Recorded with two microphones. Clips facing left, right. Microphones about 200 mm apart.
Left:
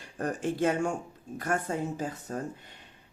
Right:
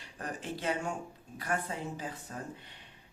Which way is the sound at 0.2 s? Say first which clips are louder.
Left 10 dB; 45° left (ahead or behind).